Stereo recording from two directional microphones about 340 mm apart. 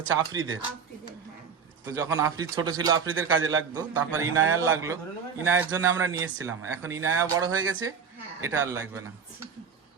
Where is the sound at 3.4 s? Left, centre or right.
Right.